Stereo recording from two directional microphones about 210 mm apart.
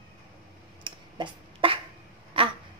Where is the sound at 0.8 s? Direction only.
25° right (ahead or behind).